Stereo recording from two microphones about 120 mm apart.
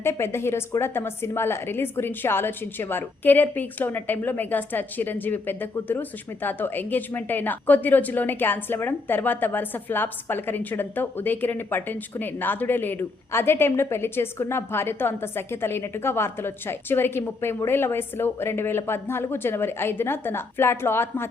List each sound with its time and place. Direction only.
0.0 s a woman's voice: 20° left (ahead or behind)